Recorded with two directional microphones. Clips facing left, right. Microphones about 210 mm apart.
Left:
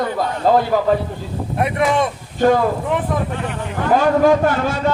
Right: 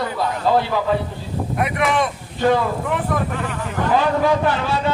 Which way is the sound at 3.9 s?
45° left (ahead or behind).